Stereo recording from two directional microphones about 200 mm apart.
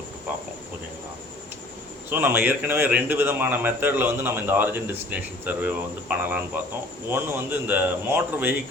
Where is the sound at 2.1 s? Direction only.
10° right (ahead or behind).